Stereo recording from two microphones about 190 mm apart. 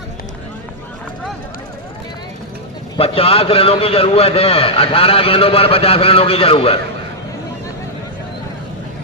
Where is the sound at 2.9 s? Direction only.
30° left (ahead or behind).